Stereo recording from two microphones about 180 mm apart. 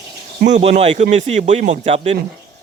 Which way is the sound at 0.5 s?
35° right (ahead or behind).